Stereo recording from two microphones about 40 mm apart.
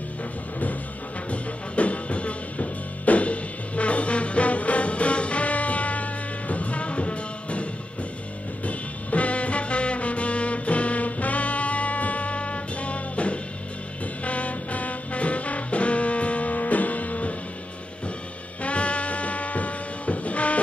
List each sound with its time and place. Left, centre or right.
1.3 s music: left
8.6 s music: left
18.6 s music: left